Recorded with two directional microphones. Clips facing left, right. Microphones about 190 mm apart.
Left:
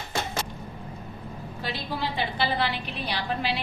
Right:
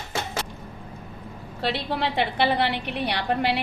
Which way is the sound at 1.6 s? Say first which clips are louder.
Right 5 dB; 70° right (ahead or behind).